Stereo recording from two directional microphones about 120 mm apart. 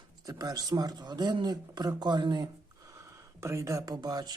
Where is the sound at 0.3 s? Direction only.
30° right (ahead or behind).